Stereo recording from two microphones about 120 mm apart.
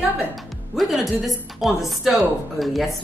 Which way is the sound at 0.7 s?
Centre (ahead or behind).